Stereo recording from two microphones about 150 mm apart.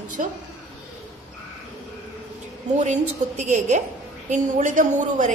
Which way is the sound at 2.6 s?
50° right (ahead or behind).